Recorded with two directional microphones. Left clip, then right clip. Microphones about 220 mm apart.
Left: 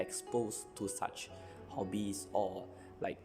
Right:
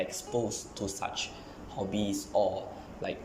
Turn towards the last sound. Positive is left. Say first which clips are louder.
# right 4 dB
turn(degrees=30)  # may be behind; listen again after turning